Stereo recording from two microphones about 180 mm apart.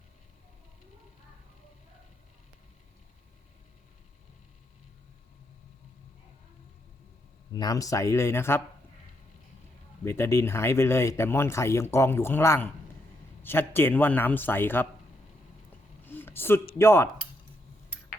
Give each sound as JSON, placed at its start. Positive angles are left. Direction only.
{"t": 7.5, "sound": "speech", "side_deg": 20}
{"t": 10.0, "sound": "speech", "side_deg": 15}
{"t": 16.1, "sound": "a sound", "side_deg": 10}
{"t": 16.7, "sound": "speech", "side_deg": 15}